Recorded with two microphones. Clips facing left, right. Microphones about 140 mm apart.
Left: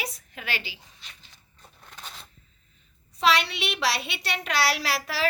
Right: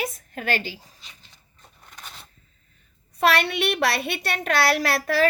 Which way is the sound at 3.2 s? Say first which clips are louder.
Right 3 dB; 55° right (ahead or behind).